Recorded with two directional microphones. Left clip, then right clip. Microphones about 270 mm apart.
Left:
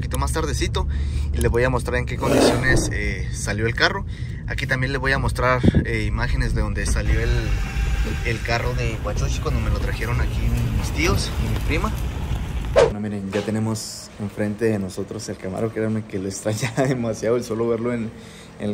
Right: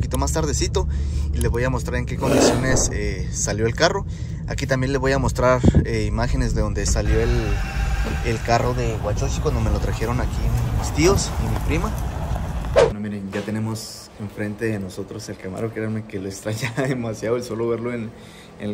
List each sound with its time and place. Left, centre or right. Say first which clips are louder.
0.2 s speech: right 1 dB; centre
2.6 s speech: left 1 dB; centre
10.8 s speech: right 5 dB; right
12.7 s speech: even; centre